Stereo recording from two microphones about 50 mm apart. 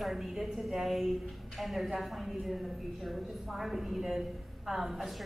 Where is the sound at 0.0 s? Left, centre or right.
Centre.